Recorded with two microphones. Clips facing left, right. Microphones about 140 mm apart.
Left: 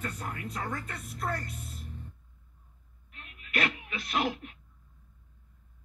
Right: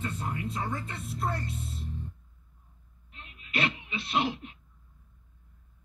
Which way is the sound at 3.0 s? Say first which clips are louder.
Right 1 dB; 25° right (ahead or behind).